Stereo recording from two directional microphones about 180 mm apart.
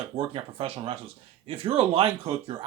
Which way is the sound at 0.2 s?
30° right (ahead or behind).